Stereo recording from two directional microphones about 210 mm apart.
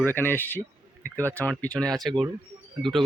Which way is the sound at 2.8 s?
Centre (ahead or behind).